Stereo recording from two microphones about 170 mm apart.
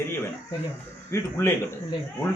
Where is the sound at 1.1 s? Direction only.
15° left (ahead or behind).